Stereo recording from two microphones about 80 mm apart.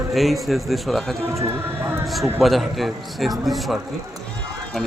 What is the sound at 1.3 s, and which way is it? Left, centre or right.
Speech, right.